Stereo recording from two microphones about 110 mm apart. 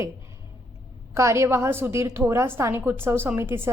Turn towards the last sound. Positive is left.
turn(degrees=-20)  # may be behind; listen again after turning